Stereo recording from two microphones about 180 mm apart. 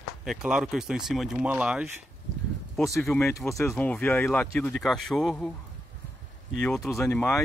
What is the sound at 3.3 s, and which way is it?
Speech, 15° left (ahead or behind).